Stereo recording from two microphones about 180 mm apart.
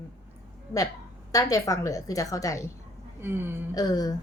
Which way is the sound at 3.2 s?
10° right (ahead or behind).